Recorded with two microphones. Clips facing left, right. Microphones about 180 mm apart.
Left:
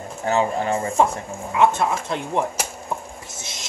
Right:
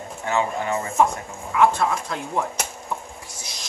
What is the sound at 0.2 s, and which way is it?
Speech, 35° left (ahead or behind).